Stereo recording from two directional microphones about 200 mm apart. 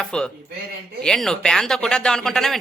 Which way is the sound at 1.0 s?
Centre (ahead or behind).